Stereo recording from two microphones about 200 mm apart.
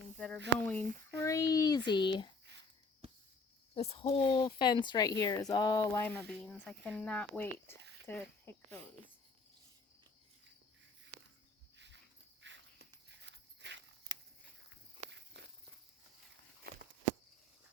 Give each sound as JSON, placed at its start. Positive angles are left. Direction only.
{"t": 0.6, "sound": "speech", "side_deg": 10}
{"t": 3.8, "sound": "speech", "side_deg": 30}
{"t": 7.8, "sound": "a sound", "side_deg": -60}
{"t": 8.0, "sound": "speech", "side_deg": 10}
{"t": 11.8, "sound": "dog", "side_deg": -65}
{"t": 14.7, "sound": "walk", "side_deg": -60}
{"t": 16.7, "sound": "walk", "side_deg": -50}